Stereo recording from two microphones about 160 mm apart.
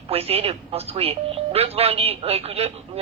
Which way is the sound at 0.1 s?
40° right (ahead or behind).